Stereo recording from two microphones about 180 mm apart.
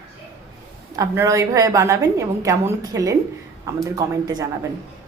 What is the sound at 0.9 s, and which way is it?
A woman's voice, 15° right (ahead or behind).